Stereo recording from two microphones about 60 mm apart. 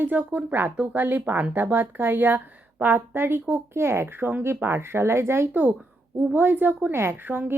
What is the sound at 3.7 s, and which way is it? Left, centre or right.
Speech, right.